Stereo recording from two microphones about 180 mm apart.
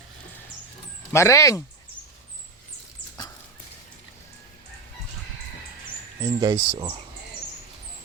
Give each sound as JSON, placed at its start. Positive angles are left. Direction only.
{"t": 1.1, "sound": "speech", "side_deg": 15}
{"t": 6.2, "sound": "speech", "side_deg": -20}